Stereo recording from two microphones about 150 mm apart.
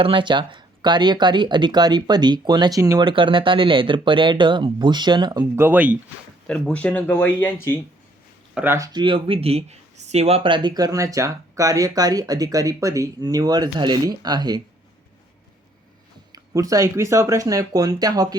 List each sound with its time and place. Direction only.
0.0 s speech: 35° right (ahead or behind)
5.5 s speech: 15° right (ahead or behind)
6.5 s speech: 5° left (ahead or behind)
8.5 s speech: 15° right (ahead or behind)
8.9 s speech: 30° right (ahead or behind)
16.3 s speech: 25° right (ahead or behind)